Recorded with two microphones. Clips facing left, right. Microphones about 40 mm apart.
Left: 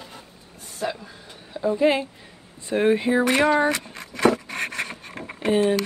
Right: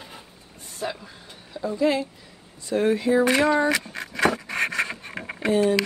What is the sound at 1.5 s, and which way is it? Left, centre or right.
A woman's voice, left.